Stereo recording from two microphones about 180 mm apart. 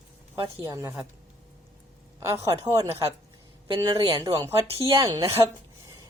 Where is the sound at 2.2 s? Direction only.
15° right (ahead or behind).